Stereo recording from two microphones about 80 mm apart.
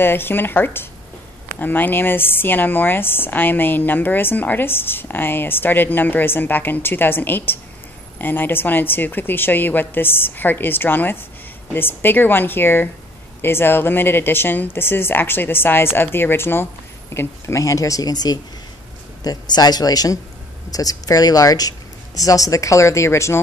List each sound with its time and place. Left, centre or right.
0.0 s speech: left